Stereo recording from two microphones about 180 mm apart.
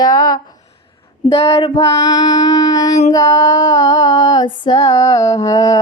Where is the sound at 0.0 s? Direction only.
20° left (ahead or behind).